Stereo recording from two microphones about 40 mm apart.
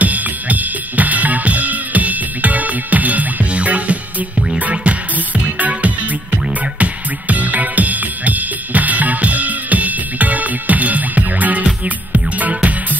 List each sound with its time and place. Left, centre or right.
0.0 s drum kit: right
4.6 s music: right